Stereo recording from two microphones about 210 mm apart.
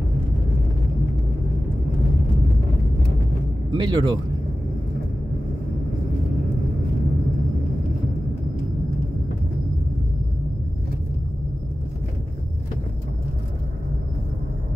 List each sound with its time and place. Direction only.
3.7 s speech: 20° right (ahead or behind)